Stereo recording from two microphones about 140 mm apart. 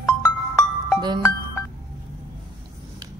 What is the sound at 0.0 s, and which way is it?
Music, 20° left (ahead or behind).